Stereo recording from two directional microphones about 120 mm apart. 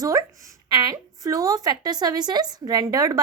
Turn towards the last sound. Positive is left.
turn(degrees=-30)  # may be behind; listen again after turning